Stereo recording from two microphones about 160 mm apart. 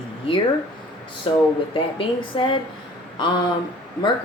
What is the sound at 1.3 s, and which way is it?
Speech, 30° left (ahead or behind).